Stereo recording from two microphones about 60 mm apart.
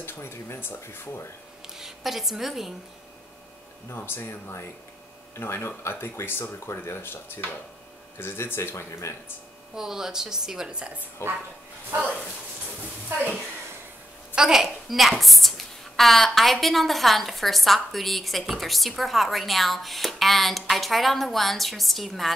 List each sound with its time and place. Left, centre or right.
0.0 s speech: left
1.8 s a woman's voice: centre
3.9 s speech: left
9.8 s a woman's voice: centre
11.2 s speech: left
14.3 s a woman's voice: centre